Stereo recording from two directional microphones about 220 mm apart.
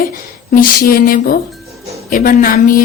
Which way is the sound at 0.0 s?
40° left (ahead or behind).